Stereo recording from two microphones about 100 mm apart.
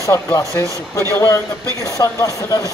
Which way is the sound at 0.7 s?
35° right (ahead or behind).